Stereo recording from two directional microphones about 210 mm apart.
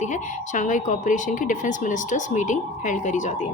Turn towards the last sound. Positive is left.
turn(degrees=35)  # may be behind; listen again after turning